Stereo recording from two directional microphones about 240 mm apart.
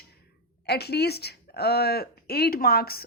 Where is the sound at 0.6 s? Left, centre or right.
Left.